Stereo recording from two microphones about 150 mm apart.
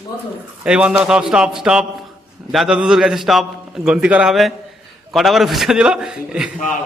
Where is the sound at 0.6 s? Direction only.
5° right (ahead or behind).